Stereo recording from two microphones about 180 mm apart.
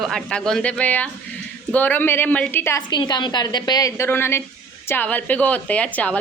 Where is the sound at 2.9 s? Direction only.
25° left (ahead or behind).